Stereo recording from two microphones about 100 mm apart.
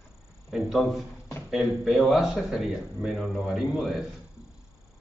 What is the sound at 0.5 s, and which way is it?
Speech, centre (ahead or behind).